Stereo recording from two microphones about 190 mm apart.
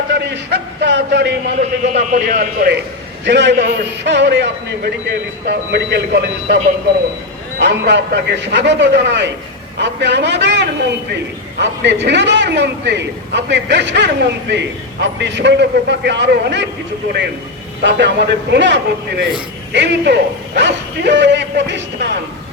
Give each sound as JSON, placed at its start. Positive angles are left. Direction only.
{"t": 0.1, "sound": "a man's voice", "side_deg": -65}
{"t": 1.9, "sound": "speech", "side_deg": -45}
{"t": 3.2, "sound": "a man's voice", "side_deg": -65}
{"t": 7.6, "sound": "a man's voice", "side_deg": -65}
{"t": 17.8, "sound": "a man's voice", "side_deg": -60}